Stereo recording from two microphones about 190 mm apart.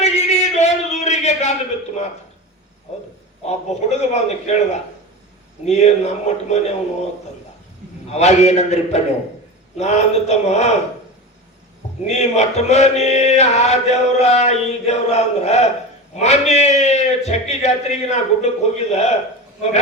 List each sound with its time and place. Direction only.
0.0 s a sound: 35° left (ahead or behind)
3.4 s mantra: 35° left (ahead or behind)
8.1 s mantra: 35° left (ahead or behind)
12.0 s mantra: 35° left (ahead or behind)